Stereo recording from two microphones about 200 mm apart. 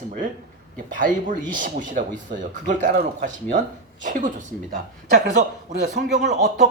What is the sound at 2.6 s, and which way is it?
Speech, 40° right (ahead or behind).